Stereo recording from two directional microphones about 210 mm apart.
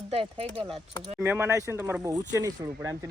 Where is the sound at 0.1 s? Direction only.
25° right (ahead or behind).